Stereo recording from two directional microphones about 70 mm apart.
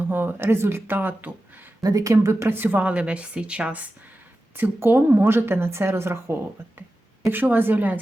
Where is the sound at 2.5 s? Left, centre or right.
Right.